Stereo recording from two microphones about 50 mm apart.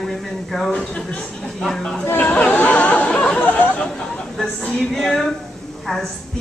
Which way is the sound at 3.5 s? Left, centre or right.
Left.